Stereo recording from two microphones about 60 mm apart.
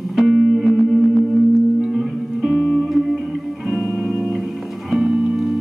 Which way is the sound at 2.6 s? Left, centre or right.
Centre.